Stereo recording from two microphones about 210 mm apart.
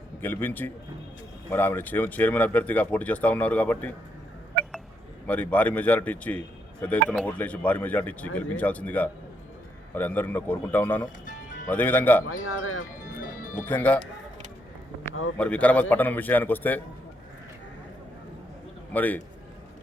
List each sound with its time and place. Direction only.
0.2 s speech: 10° left (ahead or behind)
5.2 s speech: 5° left (ahead or behind)
12.3 s speech: 70° left (ahead or behind)
13.1 s music: 40° left (ahead or behind)
13.6 s speech: 5° left (ahead or behind)
15.4 s speech: 5° left (ahead or behind)
18.9 s speech: 10° left (ahead or behind)